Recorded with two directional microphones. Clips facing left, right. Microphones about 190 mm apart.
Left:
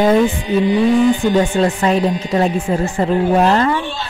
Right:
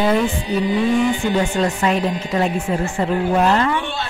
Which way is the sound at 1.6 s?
35° left (ahead or behind).